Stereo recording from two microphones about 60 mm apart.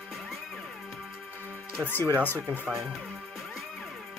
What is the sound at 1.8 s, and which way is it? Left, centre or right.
Speech, left.